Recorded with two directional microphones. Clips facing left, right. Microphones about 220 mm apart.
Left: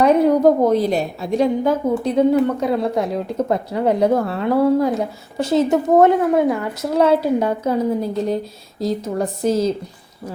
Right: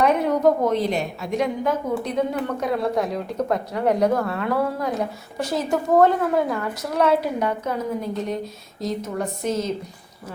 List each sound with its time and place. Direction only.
0.0 s a woman's voice: 35° left (ahead or behind)